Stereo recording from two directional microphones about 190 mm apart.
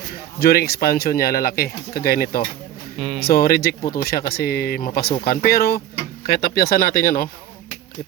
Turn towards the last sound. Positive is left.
turn(degrees=50)  # may be behind; listen again after turning